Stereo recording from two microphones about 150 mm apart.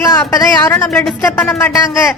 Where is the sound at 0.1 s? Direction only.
25° left (ahead or behind).